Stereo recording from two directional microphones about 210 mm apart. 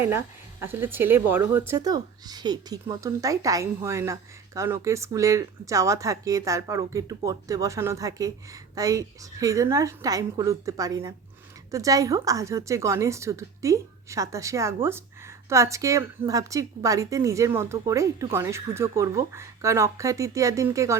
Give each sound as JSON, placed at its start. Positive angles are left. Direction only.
{"t": 0.0, "sound": "a woman's voice", "side_deg": -10}